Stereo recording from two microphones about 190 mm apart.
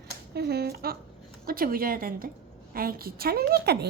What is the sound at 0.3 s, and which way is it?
A woman's voice, 55° right (ahead or behind).